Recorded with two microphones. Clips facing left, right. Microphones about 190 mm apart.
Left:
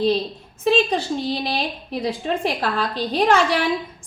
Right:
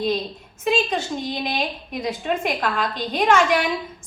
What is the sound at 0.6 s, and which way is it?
A woman's voice, 35° left (ahead or behind).